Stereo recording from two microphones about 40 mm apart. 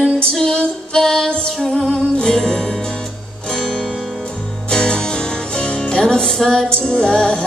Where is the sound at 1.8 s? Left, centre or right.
Centre.